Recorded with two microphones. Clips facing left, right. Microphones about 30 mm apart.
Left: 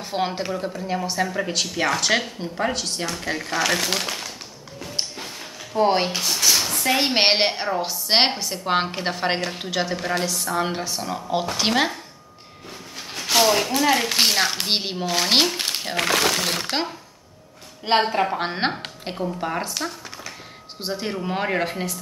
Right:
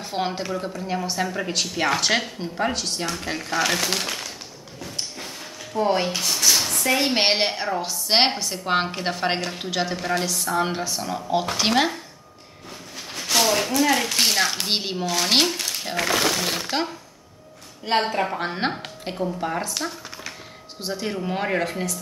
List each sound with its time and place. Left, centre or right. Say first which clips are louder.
0.0 s speech: left 1 dB; centre
5.8 s speech: left 2 dB; left
6.1 s a sound: even; centre
7.2 s a woman's voice: left 2 dB; left; by 12.0 s centre
13.1 s a sound: left 2 dB; centre
13.7 s speech: left 1 dB; centre
16.0 s speech: left 1 dB; left
18.0 s speech: left 2 dB; centre
18.4 s a woman's voice: left 2 dB; left
19.0 s speech: even; centre
20.8 s a woman's voice: even; left
21.1 s speech: even; centre